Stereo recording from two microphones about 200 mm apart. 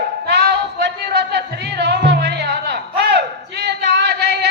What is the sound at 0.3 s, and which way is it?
Music, 60° right (ahead or behind).